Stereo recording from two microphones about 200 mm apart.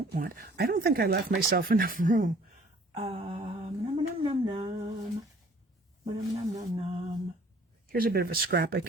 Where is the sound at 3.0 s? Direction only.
30° right (ahead or behind).